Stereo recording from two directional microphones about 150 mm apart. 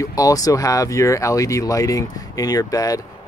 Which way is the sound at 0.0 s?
25° left (ahead or behind).